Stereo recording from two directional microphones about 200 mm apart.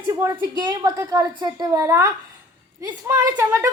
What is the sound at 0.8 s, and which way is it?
Speech, 15° right (ahead or behind).